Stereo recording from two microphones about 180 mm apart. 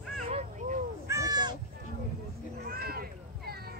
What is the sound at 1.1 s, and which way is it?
Crow, 20° right (ahead or behind).